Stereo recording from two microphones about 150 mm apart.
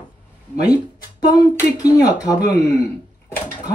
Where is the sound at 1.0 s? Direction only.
25° left (ahead or behind).